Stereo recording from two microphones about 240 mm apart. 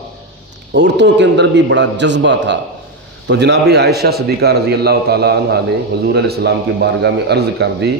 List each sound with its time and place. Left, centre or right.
0.7 s a man's voice: right